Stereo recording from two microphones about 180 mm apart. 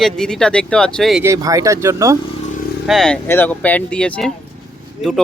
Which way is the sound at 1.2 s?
20° right (ahead or behind).